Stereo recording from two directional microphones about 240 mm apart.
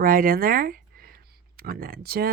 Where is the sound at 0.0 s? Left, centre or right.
Right.